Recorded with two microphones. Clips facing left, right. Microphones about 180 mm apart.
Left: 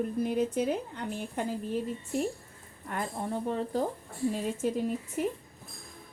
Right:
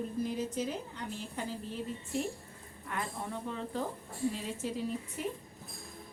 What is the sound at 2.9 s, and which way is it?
Speech, 45° left (ahead or behind).